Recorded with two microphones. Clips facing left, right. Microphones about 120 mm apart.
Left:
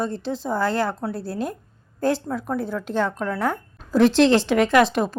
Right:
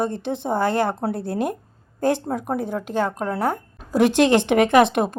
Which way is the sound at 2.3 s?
50° right (ahead or behind).